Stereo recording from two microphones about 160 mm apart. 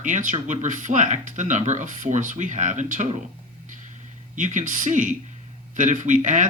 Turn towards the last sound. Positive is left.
turn(degrees=-50)  # may be behind; listen again after turning